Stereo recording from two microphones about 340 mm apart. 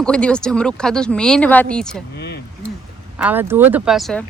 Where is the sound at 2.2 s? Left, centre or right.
Left.